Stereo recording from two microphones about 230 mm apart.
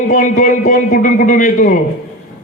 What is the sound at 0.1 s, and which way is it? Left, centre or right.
A man's voice, left.